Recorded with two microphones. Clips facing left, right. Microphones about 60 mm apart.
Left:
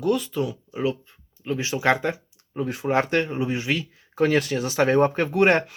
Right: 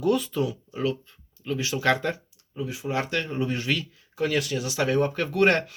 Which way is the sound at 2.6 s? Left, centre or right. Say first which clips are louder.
Left 6 dB; left.